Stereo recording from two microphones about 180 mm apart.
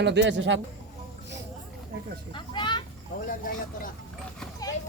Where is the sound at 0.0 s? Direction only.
75° right (ahead or behind).